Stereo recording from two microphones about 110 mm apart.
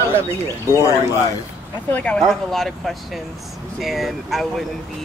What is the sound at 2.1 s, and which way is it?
Speech, 5° left (ahead or behind).